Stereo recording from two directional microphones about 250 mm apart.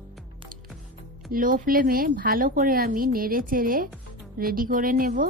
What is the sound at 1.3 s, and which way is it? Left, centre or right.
Speech, right.